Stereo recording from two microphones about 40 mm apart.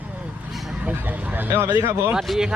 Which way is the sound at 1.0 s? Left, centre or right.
Right.